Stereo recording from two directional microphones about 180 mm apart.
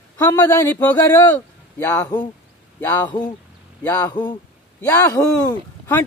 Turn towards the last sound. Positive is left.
turn(degrees=15)  # may be behind; listen again after turning